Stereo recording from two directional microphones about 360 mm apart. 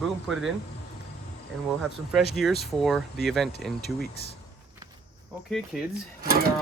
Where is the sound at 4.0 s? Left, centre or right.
Left.